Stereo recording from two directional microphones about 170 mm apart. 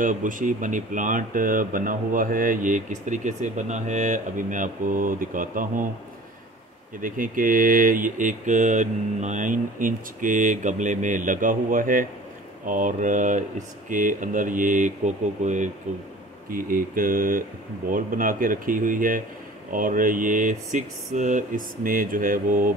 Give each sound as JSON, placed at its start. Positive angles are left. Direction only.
{"t": 0.0, "sound": "speech", "side_deg": -50}
{"t": 7.0, "sound": "speech", "side_deg": -55}
{"t": 16.4, "sound": "speech", "side_deg": -55}